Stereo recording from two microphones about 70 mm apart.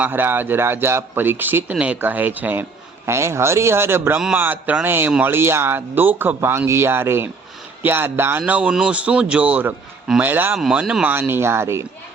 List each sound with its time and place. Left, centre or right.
0.0 s speech: right
1.7 s speech: centre
3.1 s speech: right
8.4 s speech: right